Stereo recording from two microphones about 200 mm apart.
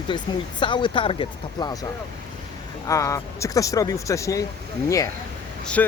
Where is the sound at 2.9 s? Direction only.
15° left (ahead or behind).